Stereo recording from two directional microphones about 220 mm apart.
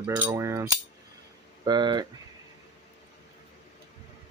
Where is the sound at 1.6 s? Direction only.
20° right (ahead or behind).